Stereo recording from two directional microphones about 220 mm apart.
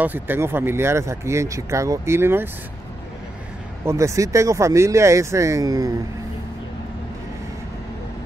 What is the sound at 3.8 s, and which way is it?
Speech, 15° right (ahead or behind).